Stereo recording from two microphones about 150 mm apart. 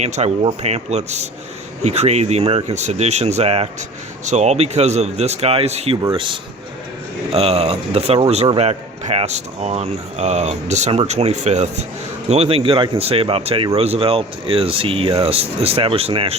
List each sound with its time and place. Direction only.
0.0 s speech: 45° right (ahead or behind)